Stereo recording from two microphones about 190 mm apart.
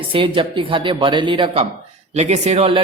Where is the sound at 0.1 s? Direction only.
25° right (ahead or behind).